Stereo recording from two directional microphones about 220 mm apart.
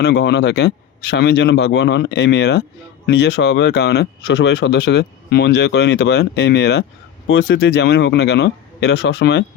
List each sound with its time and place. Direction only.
0.0 s speech: 50° left (ahead or behind)